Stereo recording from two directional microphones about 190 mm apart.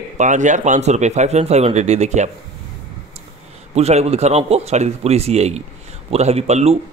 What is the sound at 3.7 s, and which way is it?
A man's voice, 35° right (ahead or behind).